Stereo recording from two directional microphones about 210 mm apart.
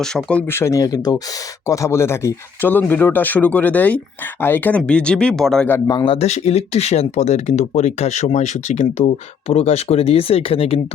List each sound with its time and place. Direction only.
0.0 s speech: 5° left (ahead or behind)
5.9 s speech: 25° left (ahead or behind)